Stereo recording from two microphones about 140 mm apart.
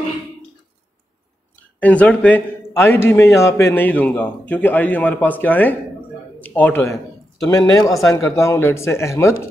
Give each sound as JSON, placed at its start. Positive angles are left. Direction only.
{"t": 1.8, "sound": "a man's voice", "side_deg": 10}